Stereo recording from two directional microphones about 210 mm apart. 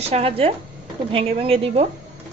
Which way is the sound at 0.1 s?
25° right (ahead or behind).